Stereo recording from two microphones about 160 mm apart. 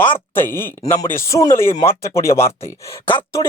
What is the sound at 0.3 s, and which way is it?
Speech, 15° left (ahead or behind).